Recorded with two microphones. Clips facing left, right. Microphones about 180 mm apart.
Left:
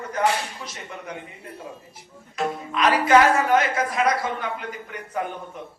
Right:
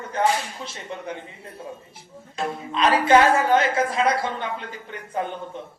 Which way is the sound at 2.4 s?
25° right (ahead or behind).